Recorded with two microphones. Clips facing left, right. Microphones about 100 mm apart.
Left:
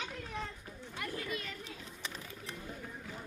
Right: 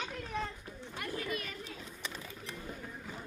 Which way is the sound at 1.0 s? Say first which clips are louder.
Right 2 dB; 20° right (ahead or behind).